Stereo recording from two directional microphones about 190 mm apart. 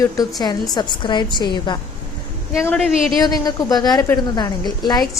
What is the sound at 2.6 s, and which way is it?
Speech, 5° left (ahead or behind).